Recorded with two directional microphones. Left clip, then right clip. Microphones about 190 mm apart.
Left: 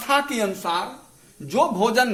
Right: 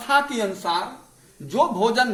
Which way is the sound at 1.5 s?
20° left (ahead or behind).